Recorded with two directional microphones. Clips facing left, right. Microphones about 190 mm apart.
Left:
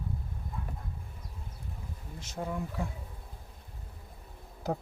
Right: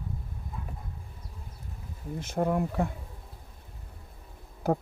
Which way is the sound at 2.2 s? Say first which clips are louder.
Right 9 dB; 55° right (ahead or behind).